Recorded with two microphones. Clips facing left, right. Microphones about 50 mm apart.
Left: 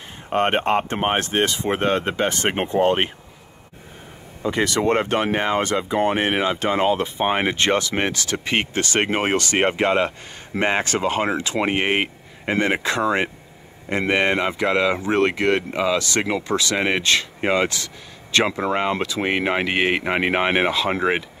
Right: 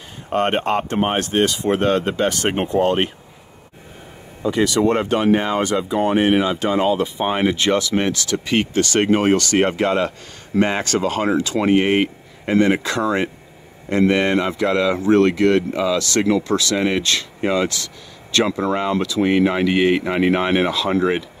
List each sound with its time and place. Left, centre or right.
0.3 s speech: centre
4.4 s speech: left